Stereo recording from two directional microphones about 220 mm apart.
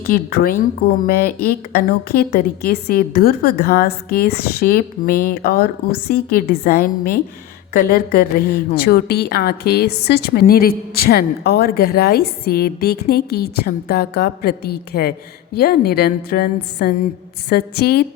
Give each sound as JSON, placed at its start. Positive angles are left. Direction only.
{"t": 0.1, "sound": "a woman's voice", "side_deg": 40}